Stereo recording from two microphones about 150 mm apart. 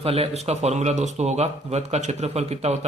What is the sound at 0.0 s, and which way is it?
Speech, 40° right (ahead or behind).